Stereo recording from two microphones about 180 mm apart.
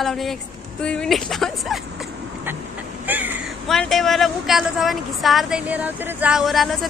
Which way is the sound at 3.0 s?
10° right (ahead or behind).